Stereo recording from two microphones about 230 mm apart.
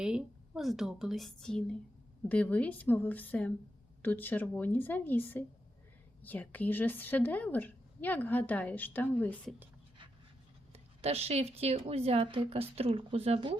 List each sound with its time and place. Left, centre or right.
0.0 s a woman's voice: centre
10.7 s speech: right